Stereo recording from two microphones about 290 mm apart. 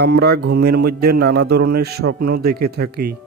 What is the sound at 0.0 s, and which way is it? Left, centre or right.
Speech, right.